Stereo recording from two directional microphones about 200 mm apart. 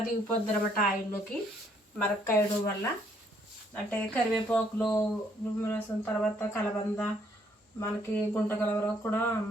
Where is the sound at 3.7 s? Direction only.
5° left (ahead or behind).